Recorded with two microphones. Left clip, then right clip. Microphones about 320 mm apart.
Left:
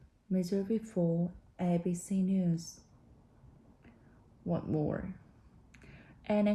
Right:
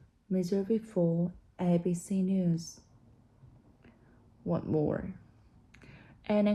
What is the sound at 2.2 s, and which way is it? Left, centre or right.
Speech, centre.